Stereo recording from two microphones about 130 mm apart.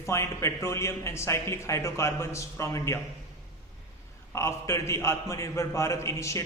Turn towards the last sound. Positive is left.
turn(degrees=20)  # may be behind; listen again after turning